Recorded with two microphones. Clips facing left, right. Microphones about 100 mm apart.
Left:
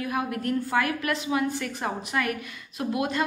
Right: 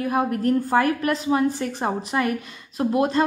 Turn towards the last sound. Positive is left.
turn(degrees=-30)  # may be behind; listen again after turning